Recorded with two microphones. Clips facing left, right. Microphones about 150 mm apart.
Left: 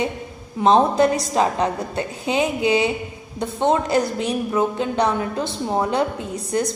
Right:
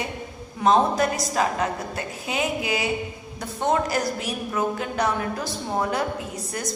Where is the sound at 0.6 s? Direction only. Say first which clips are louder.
Left 4 dB; 30° left (ahead or behind).